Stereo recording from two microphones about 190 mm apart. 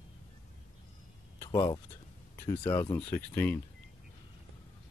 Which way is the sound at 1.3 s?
15° left (ahead or behind).